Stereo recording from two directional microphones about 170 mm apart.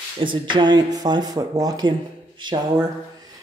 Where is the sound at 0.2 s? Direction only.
30° right (ahead or behind).